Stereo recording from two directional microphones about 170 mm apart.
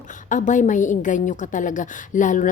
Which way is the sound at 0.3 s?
50° left (ahead or behind).